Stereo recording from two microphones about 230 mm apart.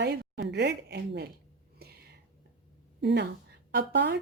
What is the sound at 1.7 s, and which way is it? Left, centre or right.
Whispering, right.